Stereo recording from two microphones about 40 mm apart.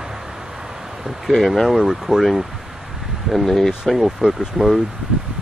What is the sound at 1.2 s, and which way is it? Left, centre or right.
Speech, centre.